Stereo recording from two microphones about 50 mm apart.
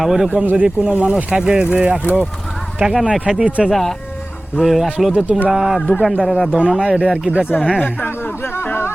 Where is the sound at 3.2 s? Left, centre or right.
Centre.